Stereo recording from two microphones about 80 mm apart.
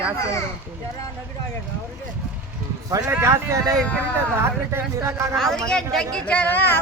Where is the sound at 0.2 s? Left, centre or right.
Left.